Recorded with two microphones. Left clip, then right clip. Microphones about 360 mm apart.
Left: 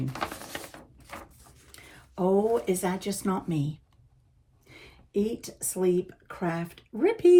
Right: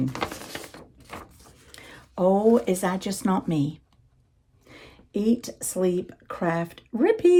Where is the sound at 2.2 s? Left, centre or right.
Right.